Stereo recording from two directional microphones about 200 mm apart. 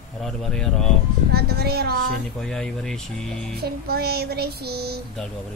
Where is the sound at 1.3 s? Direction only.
50° right (ahead or behind).